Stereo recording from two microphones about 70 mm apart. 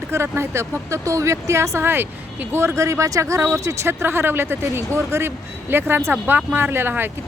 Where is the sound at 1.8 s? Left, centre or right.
Right.